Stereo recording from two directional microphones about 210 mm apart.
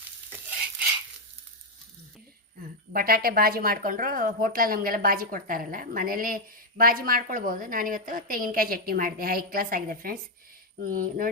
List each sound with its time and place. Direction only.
2.9 s speech: 45° right (ahead or behind)